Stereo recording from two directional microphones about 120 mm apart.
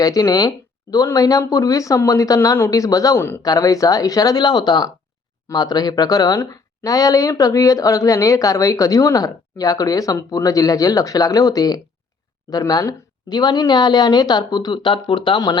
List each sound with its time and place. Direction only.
0.0 s speech: 30° left (ahead or behind)